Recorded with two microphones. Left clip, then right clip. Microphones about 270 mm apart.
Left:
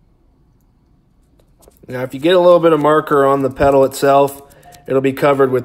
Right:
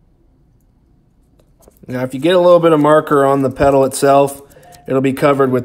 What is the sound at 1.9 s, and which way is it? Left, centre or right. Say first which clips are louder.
Speech: even; centre.